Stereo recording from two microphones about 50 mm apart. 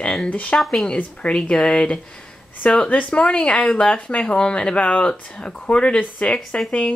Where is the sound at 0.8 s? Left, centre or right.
Left.